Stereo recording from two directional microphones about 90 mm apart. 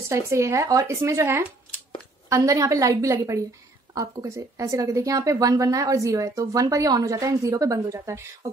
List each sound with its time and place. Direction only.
0.1 s a woman's voice: 30° right (ahead or behind)